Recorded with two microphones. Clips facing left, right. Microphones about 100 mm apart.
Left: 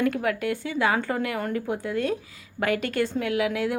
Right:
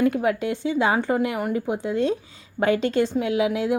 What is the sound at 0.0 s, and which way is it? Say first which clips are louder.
A woman's voice: right 3 dB; 20° right (ahead or behind).